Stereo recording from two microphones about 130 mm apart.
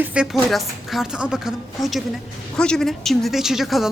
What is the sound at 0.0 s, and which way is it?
A woman's voice, 10° right (ahead or behind).